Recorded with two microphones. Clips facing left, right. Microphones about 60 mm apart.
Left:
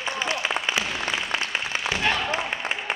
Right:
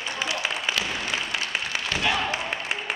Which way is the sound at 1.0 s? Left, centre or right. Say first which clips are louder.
Left 2 dB; left.